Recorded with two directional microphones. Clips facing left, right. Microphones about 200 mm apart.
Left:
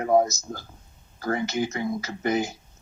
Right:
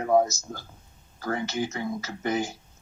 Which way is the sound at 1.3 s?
15° left (ahead or behind).